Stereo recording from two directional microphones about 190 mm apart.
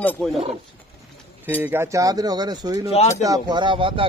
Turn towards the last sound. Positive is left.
turn(degrees=-25)  # may be behind; listen again after turning